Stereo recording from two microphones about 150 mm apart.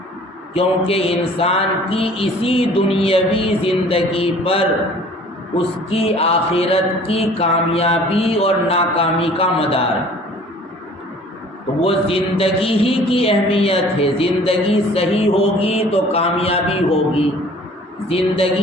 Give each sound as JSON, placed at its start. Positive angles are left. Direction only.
{"t": 0.5, "sound": "a man's voice", "side_deg": 40}
{"t": 11.8, "sound": "a man's voice", "side_deg": 40}
{"t": 18.1, "sound": "a man's voice", "side_deg": 40}